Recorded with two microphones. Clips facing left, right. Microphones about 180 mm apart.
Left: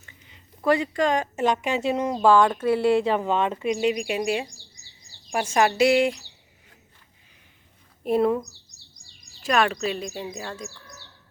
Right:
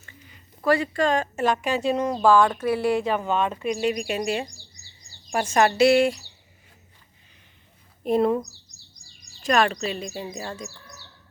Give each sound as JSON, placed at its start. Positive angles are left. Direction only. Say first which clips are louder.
{"t": 0.0, "sound": "speech", "louder": "right 3 dB", "side_deg": 20}
{"t": 8.0, "sound": "speech", "louder": "even", "side_deg": 5}
{"t": 9.4, "sound": "speech", "louder": "right 1 dB", "side_deg": 5}